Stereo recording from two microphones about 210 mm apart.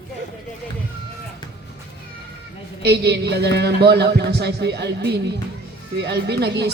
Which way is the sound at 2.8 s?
50° right (ahead or behind).